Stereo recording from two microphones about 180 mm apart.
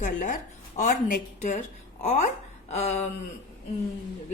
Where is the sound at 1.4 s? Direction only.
40° left (ahead or behind).